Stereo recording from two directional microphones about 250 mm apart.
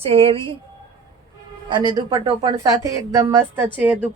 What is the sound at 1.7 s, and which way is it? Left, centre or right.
A woman's voice, centre.